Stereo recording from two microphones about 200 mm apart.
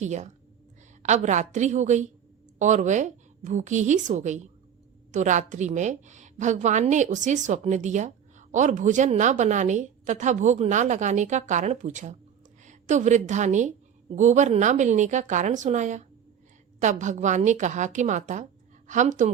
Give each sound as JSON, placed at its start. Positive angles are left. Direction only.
{"t": 0.0, "sound": "a woman's voice", "side_deg": -35}